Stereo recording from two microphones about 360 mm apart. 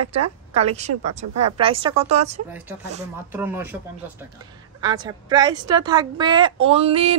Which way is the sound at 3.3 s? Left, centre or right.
Centre.